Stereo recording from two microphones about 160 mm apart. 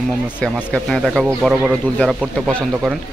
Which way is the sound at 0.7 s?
5° left (ahead or behind).